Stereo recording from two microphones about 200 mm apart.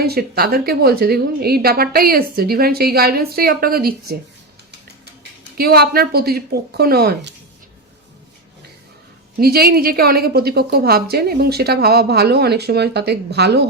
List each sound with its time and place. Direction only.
0.0 s a woman's voice: 50° right (ahead or behind)
5.5 s a woman's voice: 50° right (ahead or behind)
9.4 s a woman's voice: 50° right (ahead or behind)